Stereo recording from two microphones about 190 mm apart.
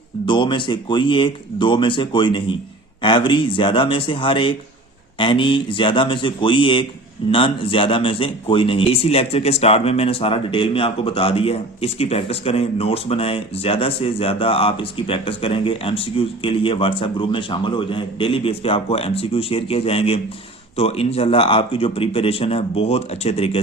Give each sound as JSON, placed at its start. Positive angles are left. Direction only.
{"t": 0.3, "sound": "speech", "side_deg": 25}